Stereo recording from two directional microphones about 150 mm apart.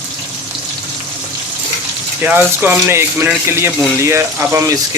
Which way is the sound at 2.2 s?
15° right (ahead or behind).